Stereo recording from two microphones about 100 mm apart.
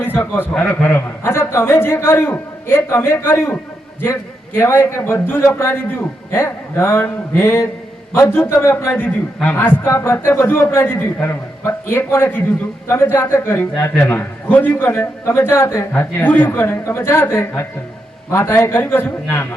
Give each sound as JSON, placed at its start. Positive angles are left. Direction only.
{"t": 0.0, "sound": "a man's voice", "side_deg": 20}
{"t": 1.2, "sound": "a man's voice", "side_deg": 25}